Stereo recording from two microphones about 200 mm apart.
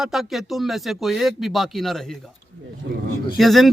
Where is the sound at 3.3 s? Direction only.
Centre (ahead or behind).